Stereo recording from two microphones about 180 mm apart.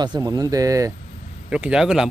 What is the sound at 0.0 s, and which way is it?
Speech, 20° right (ahead or behind).